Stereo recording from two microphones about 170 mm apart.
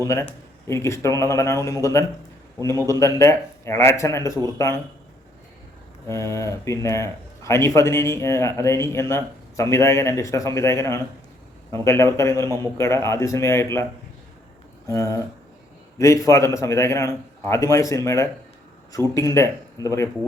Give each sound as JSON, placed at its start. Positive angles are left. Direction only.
{"t": 0.7, "sound": "speech", "side_deg": 15}
{"t": 6.1, "sound": "speech", "side_deg": 15}
{"t": 14.9, "sound": "speech", "side_deg": 20}